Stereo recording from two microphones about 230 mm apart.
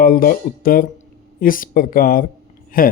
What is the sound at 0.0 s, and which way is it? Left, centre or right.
Speech, left.